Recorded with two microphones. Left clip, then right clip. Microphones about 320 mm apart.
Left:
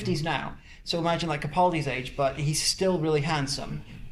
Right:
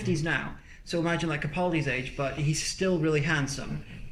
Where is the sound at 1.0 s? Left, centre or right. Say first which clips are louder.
Left 1 dB; centre.